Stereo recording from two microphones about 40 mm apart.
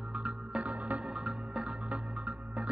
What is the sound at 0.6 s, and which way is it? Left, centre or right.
Music, right.